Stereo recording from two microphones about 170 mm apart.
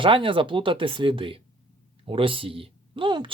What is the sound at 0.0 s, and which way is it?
Speech, 30° right (ahead or behind).